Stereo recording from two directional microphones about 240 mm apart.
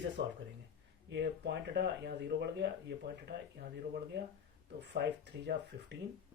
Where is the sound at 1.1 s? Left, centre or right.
Right.